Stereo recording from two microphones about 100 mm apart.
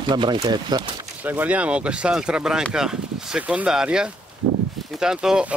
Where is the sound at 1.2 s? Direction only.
15° right (ahead or behind).